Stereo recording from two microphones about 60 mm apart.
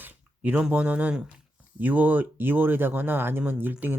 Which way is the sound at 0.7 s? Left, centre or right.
Right.